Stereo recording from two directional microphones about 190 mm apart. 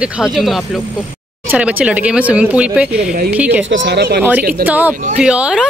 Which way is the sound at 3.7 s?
70° right (ahead or behind).